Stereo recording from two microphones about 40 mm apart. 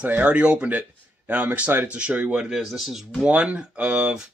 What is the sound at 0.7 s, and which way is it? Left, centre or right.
A man's voice, right.